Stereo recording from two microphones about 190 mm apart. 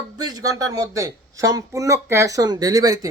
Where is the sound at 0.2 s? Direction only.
20° right (ahead or behind).